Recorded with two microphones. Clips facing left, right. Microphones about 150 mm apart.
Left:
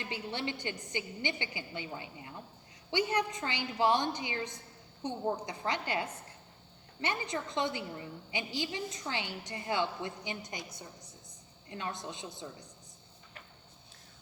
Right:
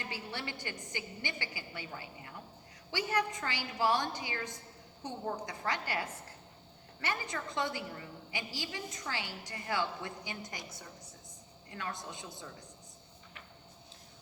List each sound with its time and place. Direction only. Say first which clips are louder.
0.0 s a woman's voice: left 4 dB; 20° left (ahead or behind)
11.7 s a woman's voice: left 2 dB; 20° left (ahead or behind)